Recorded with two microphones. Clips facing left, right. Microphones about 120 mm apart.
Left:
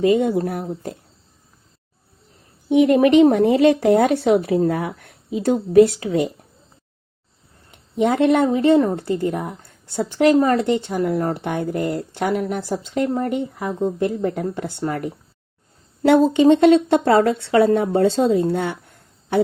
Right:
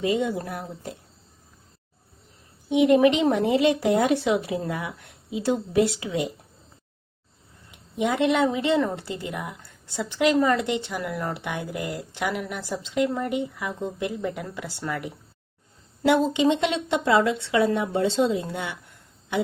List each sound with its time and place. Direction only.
0.0 s a woman's voice: 30° left (ahead or behind)
3.0 s speech: 40° left (ahead or behind)
4.3 s a woman's voice: 30° left (ahead or behind)
7.7 s a woman's voice: 50° left (ahead or behind)
16.0 s speech: 50° left (ahead or behind)